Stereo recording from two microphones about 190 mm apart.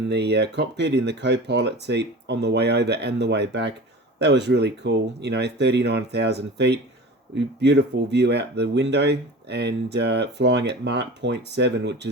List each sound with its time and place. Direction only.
0.1 s speech: 65° right (ahead or behind)